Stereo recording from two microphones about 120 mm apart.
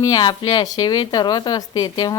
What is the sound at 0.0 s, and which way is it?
A woman's voice, 35° left (ahead or behind).